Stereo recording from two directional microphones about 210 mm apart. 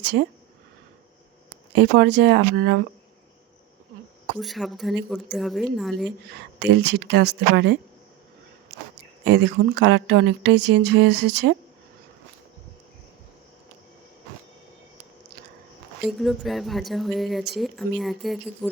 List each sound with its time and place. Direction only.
0.0 s speech: 55° right (ahead or behind)
1.7 s speech: 60° right (ahead or behind)
4.4 s speech: centre (ahead or behind)
6.6 s speech: 55° right (ahead or behind)
9.2 s speech: 55° right (ahead or behind)
16.0 s speech: centre (ahead or behind)